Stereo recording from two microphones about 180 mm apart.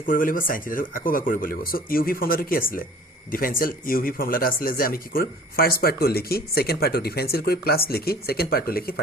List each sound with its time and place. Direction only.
0.0 s speech: 50° left (ahead or behind)